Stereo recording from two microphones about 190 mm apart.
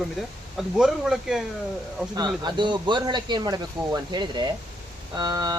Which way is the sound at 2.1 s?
20° right (ahead or behind).